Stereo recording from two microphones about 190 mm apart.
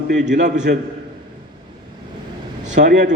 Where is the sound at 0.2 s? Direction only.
40° right (ahead or behind).